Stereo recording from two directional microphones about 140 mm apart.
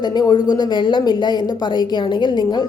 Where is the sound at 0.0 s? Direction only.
30° left (ahead or behind).